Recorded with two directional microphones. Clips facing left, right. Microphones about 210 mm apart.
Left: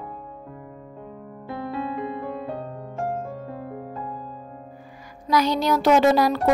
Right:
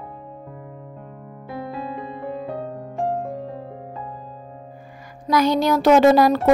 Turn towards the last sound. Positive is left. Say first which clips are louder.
# right 4 dB
turn(degrees=-50)  # may be behind; listen again after turning